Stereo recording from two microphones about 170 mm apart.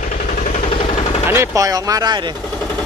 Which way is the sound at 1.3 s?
15° right (ahead or behind).